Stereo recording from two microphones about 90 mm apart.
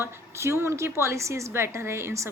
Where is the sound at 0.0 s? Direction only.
30° right (ahead or behind).